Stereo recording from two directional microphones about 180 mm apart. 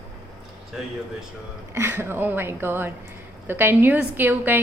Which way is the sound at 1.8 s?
10° right (ahead or behind).